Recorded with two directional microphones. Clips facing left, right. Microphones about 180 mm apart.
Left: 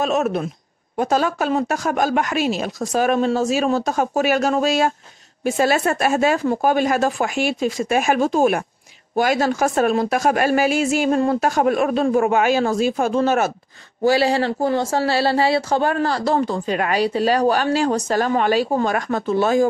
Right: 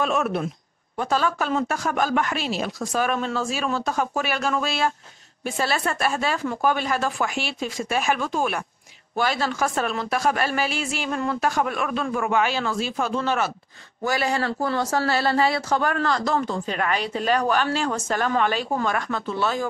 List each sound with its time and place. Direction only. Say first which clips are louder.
0.0 s speech: left 4 dB; 40° left (ahead or behind)
14.0 s speech: left 7 dB; 30° left (ahead or behind); by 19.7 s 45° left (ahead or behind)